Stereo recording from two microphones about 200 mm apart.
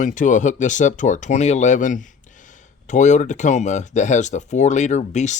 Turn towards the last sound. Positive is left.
turn(degrees=35)  # may be behind; listen again after turning